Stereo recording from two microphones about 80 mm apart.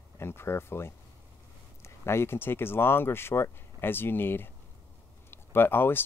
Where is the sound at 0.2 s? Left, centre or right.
Left.